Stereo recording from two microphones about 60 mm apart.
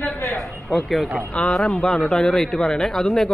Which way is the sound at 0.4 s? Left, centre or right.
Centre.